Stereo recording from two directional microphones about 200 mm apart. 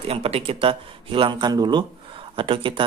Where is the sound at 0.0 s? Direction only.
30° right (ahead or behind).